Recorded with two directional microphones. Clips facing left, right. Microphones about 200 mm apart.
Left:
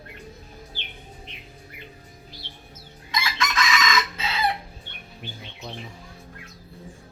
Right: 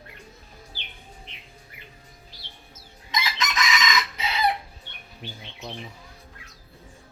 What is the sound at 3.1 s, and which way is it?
Chicken, 20° right (ahead or behind).